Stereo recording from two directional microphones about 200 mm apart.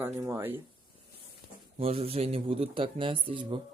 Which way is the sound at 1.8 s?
30° right (ahead or behind).